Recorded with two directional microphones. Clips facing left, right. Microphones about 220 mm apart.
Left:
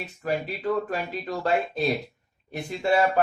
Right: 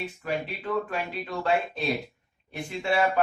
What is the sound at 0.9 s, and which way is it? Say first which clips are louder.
Speech: left 2 dB; 40° left (ahead or behind).